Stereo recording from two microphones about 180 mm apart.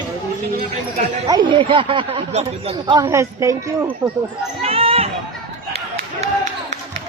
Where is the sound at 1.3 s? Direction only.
25° right (ahead or behind).